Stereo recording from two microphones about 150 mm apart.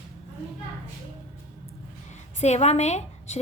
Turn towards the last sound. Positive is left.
turn(degrees=50)  # may be behind; listen again after turning